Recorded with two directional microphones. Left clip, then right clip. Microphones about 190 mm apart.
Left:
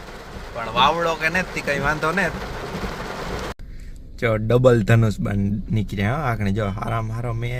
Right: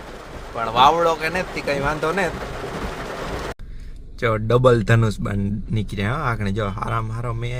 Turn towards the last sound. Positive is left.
turn(degrees=0)  # may be behind; listen again after turning